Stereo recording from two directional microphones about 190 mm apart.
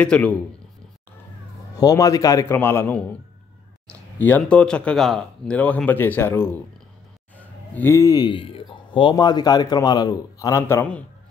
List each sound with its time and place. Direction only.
0.0 s speech: 5° left (ahead or behind)
1.8 s speech: 20° left (ahead or behind)
4.4 s a man's voice: 5° left (ahead or behind)